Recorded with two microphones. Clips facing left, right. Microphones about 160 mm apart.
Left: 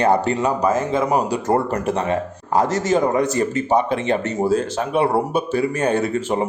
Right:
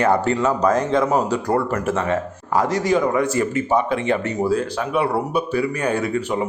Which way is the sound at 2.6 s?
45° left (ahead or behind).